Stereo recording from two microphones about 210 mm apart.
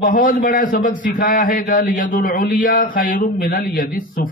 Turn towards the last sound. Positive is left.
turn(degrees=45)  # may be behind; listen again after turning